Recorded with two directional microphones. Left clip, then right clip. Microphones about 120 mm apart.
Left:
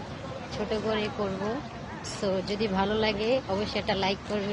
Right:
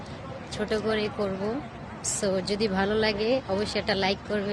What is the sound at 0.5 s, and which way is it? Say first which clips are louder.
Speech: right 2 dB; 60° right (ahead or behind).